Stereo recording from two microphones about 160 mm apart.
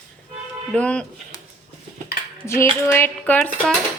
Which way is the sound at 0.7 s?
10° left (ahead or behind).